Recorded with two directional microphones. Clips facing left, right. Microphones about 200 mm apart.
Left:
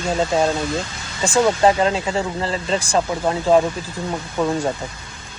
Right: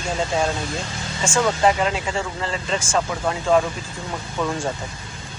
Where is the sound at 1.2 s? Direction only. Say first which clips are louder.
Left 4 dB; 35° left (ahead or behind).